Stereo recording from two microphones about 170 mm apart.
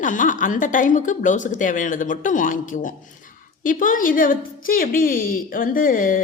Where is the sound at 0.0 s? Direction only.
50° left (ahead or behind).